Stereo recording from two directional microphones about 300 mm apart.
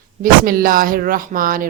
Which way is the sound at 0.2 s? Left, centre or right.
Right.